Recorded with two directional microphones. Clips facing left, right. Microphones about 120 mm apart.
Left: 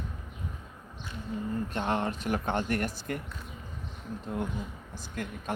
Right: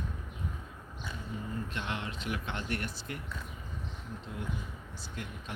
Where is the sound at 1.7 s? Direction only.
45° left (ahead or behind).